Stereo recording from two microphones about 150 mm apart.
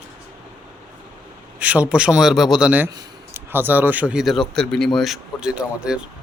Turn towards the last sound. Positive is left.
turn(degrees=-5)  # may be behind; listen again after turning